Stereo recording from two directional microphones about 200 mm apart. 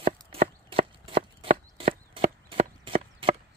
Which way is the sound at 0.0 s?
30° right (ahead or behind).